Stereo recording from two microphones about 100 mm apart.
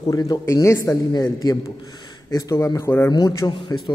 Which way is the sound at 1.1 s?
40° left (ahead or behind).